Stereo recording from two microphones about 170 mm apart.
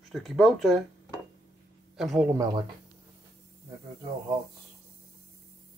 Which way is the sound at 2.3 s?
20° right (ahead or behind).